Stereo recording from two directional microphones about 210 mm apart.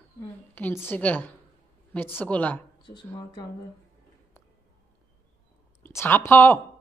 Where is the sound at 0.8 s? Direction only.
10° left (ahead or behind).